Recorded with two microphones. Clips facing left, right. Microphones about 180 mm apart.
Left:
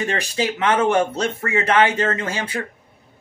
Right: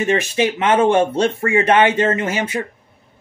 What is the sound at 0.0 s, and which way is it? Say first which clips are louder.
Speech: right 5 dB; 20° right (ahead or behind).